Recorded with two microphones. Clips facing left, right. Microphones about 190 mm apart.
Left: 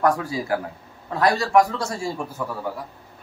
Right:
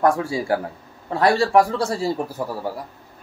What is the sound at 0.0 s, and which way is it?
Speech, 25° right (ahead or behind).